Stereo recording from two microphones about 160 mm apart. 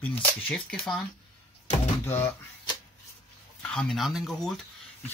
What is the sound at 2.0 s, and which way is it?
Speech, 15° left (ahead or behind).